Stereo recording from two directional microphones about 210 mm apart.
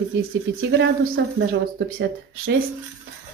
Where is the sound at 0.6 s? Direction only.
55° right (ahead or behind).